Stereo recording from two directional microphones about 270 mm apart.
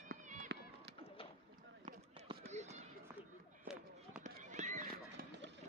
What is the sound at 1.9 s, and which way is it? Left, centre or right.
Run, right.